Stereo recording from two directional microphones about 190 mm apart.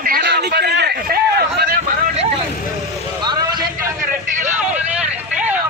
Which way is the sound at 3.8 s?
15° right (ahead or behind).